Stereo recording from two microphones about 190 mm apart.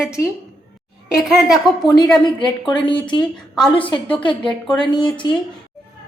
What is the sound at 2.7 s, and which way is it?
Speech, 25° left (ahead or behind).